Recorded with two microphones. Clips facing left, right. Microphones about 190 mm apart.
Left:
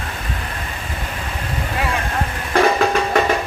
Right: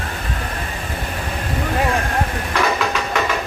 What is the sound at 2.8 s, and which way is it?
Music, 50° left (ahead or behind).